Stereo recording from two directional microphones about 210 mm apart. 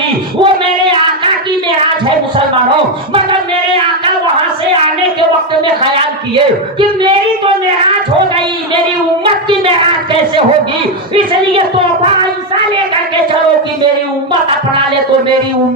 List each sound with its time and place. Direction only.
0.4 s a sound: 25° right (ahead or behind)
6.3 s a woman's voice: 25° right (ahead or behind)
9.2 s speech: 25° right (ahead or behind)